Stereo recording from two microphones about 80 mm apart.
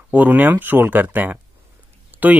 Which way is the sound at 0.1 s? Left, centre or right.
Right.